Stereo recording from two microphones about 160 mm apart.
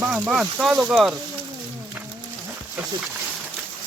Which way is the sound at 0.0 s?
5° right (ahead or behind).